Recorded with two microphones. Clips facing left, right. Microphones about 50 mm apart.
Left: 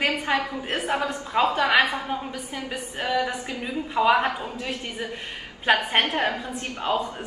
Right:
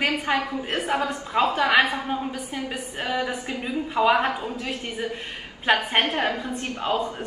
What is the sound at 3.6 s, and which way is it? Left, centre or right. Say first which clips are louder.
Speech: right 1 dB; centre.